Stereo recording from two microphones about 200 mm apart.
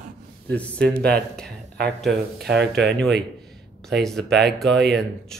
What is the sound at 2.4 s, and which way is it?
Speech, 55° right (ahead or behind).